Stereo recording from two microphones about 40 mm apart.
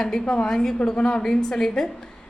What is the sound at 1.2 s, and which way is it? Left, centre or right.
Speech, centre.